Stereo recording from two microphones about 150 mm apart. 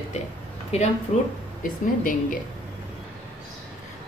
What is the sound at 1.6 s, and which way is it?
Speech, 65° left (ahead or behind).